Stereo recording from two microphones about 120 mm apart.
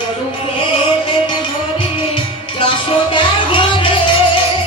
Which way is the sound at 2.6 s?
45° left (ahead or behind).